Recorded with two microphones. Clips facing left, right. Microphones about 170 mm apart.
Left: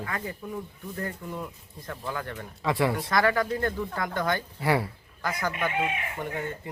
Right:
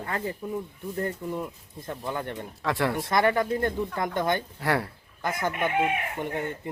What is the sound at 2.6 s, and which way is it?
Speech, centre (ahead or behind).